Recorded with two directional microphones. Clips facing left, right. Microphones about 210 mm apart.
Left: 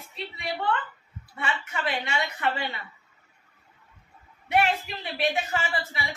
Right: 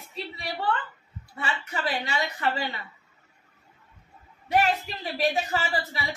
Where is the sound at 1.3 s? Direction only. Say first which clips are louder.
Even; 35° right (ahead or behind).